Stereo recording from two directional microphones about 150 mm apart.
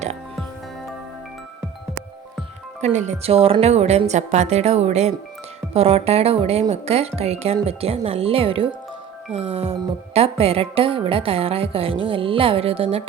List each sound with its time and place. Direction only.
2.8 s a woman's voice: 50° right (ahead or behind)